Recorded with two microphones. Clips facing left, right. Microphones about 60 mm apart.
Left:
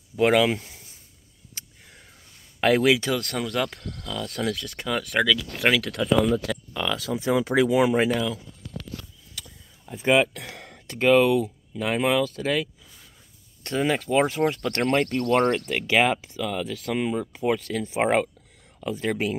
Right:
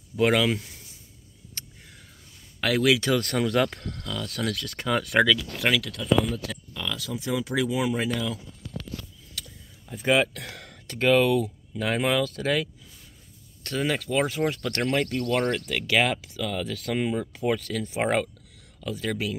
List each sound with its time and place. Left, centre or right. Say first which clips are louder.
0.1 s speech: left 2 dB; centre
1.6 s a sound: right 1 dB; centre
2.6 s speech: left 3 dB; left
3.1 s speech: right 3 dB; centre
4.3 s speech: left 3 dB; centre
4.8 s speech: right 1 dB; centre
6.0 s speech: left 1 dB; left
6.7 s speech: left 5 dB; left
7.2 s speech: left 6 dB; left
9.3 s vehicle: right 1 dB; centre
9.9 s speech: left 2 dB; centre
13.7 s speech: left 3 dB; centre